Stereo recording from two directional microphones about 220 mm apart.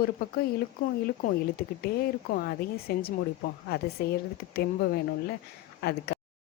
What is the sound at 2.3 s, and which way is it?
A woman's voice, 45° left (ahead or behind).